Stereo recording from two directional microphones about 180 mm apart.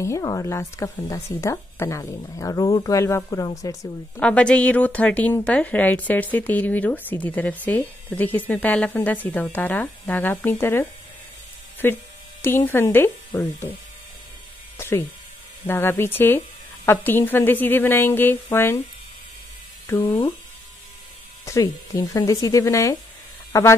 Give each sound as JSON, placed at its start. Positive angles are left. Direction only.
{"t": 0.0, "sound": "a woman's voice", "side_deg": 15}
{"t": 4.2, "sound": "a woman's voice", "side_deg": 5}
{"t": 14.8, "sound": "a sound", "side_deg": 15}
{"t": 15.6, "sound": "a woman's voice", "side_deg": 10}
{"t": 19.9, "sound": "a woman's voice", "side_deg": 15}
{"t": 21.5, "sound": "a woman's voice", "side_deg": 20}